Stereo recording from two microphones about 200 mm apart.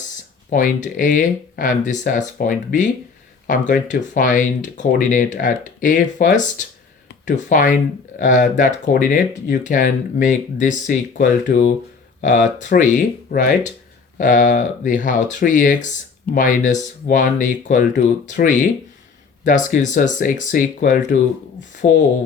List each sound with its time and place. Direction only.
0.5 s speech: 40° left (ahead or behind)